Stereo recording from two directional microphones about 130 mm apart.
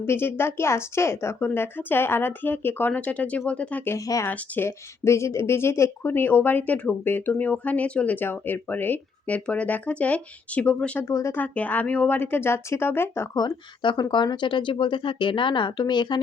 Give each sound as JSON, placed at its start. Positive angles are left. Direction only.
{"t": 0.0, "sound": "speech", "side_deg": 15}
{"t": 3.9, "sound": "speech", "side_deg": 25}
{"t": 11.0, "sound": "speech", "side_deg": 20}
{"t": 13.4, "sound": "speech", "side_deg": 30}